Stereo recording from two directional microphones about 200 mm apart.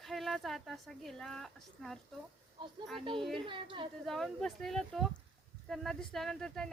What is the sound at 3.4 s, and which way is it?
Speech, 25° right (ahead or behind).